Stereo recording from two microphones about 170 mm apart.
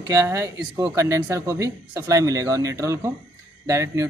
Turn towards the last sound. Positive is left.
turn(degrees=-20)  # may be behind; listen again after turning